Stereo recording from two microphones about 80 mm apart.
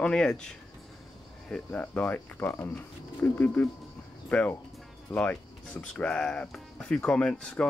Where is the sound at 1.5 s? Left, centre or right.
Centre.